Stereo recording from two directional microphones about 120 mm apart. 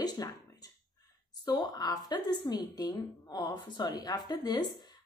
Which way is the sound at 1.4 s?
35° left (ahead or behind).